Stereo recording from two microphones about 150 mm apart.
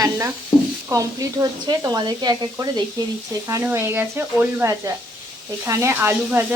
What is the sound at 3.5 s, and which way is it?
Speech, 15° right (ahead or behind).